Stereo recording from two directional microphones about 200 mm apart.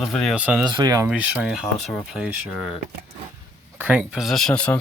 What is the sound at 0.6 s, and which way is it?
Speech, 20° right (ahead or behind).